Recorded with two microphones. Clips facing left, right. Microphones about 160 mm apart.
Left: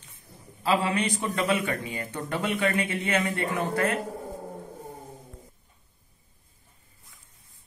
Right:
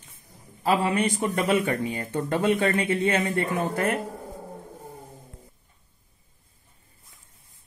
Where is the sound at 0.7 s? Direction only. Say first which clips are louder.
Right 2 dB; 50° right (ahead or behind).